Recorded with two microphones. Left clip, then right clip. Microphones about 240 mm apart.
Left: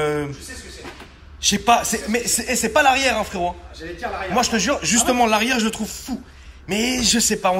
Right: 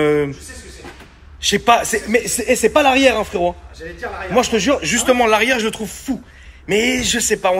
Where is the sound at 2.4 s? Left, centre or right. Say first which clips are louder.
Right 7 dB; left.